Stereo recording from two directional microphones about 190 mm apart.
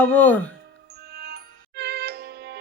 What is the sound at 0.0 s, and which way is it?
Speech, 10° left (ahead or behind).